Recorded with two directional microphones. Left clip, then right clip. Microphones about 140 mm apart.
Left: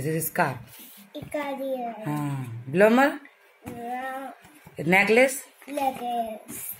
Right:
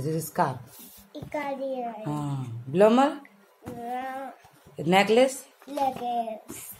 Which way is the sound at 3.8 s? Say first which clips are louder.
Left 1 dB; 30° left (ahead or behind).